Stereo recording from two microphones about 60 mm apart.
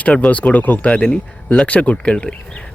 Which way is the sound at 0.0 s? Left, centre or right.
Left.